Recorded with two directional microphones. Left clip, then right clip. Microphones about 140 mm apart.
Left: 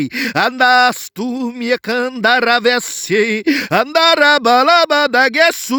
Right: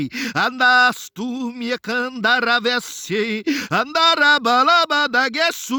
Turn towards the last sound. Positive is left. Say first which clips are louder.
# left 7 dB
turn(degrees=30)  # may be behind; listen again after turning